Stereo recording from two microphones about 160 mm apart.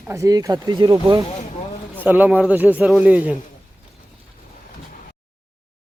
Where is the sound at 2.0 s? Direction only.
10° right (ahead or behind).